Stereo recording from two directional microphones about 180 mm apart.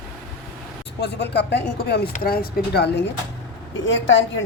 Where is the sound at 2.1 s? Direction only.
55° left (ahead or behind).